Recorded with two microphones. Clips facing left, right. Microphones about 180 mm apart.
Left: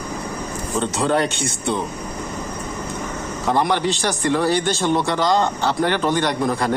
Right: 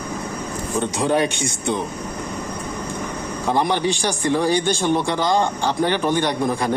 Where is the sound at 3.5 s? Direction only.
15° right (ahead or behind).